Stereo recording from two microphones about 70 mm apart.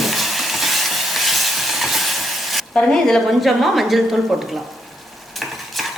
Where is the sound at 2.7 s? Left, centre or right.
Centre.